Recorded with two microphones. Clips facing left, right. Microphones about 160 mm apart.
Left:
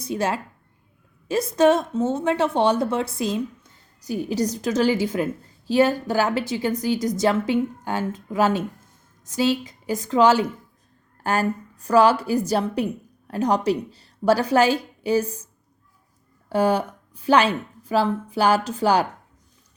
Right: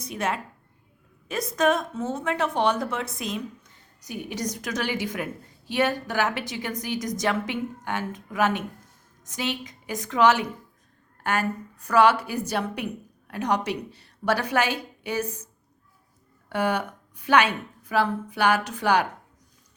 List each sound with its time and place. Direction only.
0.0 s a woman's voice: 30° left (ahead or behind)
16.5 s a woman's voice: 30° left (ahead or behind)